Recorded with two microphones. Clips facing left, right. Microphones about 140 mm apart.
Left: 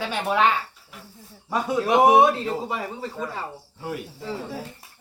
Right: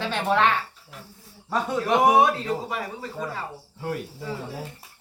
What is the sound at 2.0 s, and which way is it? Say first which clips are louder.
Speech: left 2 dB; 25° left (ahead or behind).